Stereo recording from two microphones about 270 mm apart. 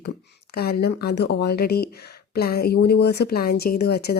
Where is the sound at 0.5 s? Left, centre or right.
Left.